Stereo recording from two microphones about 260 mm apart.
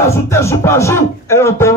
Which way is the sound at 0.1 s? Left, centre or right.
Centre.